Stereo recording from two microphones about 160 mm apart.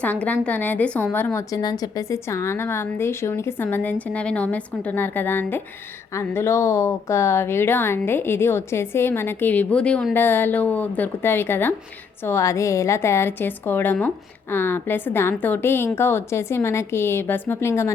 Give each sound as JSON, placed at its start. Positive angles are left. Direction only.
{"t": 0.0, "sound": "a woman's voice", "side_deg": 10}